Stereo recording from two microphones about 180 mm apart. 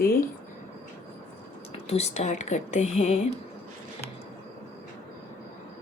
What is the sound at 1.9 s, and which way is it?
Speech, 35° left (ahead or behind).